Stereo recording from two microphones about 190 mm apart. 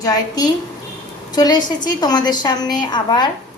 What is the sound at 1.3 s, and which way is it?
A woman's voice, 20° left (ahead or behind).